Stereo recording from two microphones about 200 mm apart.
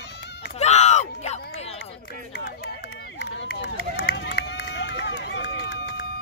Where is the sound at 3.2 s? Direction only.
55° left (ahead or behind).